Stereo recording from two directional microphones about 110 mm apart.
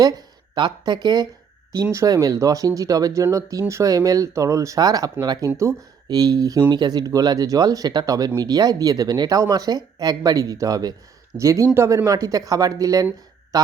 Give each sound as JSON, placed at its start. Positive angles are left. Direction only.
{"t": 0.0, "sound": "speech", "side_deg": -35}